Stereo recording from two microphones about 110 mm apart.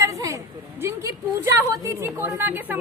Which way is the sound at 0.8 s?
25° right (ahead or behind).